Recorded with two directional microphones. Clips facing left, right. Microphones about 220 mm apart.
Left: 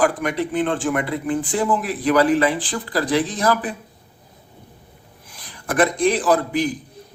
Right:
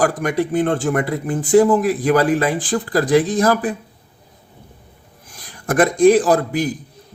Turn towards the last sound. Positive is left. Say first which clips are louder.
# right 3 dB
turn(degrees=-45)  # may be behind; listen again after turning